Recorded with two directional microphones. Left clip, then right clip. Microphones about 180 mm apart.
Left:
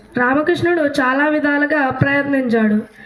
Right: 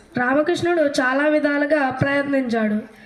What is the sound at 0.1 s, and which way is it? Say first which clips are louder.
Speech: left 3 dB; 35° right (ahead or behind).